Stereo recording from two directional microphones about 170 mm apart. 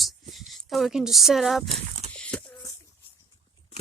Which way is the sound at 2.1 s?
5° left (ahead or behind).